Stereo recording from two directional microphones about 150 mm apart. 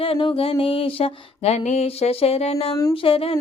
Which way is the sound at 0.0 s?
35° left (ahead or behind).